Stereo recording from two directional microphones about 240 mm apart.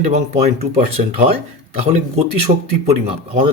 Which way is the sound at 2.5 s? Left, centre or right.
Right.